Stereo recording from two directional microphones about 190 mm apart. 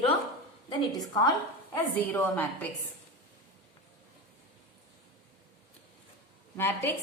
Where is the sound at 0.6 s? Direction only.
20° left (ahead or behind).